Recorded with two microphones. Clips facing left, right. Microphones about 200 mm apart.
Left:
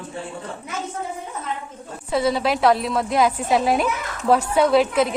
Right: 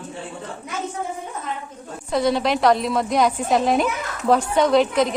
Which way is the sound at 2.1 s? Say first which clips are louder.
Right 1 dB; 5° left (ahead or behind).